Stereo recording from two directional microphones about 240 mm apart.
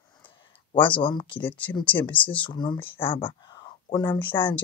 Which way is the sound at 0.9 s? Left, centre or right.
Left.